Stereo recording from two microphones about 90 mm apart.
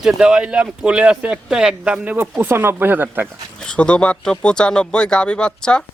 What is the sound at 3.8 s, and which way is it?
Speech, 10° left (ahead or behind).